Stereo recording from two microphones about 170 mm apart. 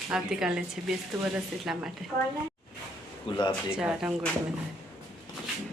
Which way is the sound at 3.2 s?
25° left (ahead or behind).